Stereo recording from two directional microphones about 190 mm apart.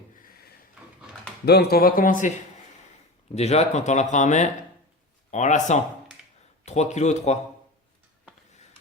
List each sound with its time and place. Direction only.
0.2 s a sound: 50° left (ahead or behind)
1.5 s speech: 55° left (ahead or behind)
3.3 s speech: 35° left (ahead or behind)